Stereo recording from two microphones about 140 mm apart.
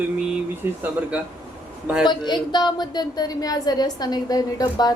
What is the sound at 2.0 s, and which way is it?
A woman's voice, 30° left (ahead or behind).